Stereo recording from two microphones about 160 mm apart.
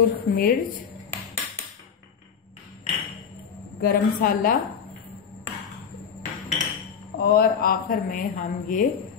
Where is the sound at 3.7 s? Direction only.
65° left (ahead or behind).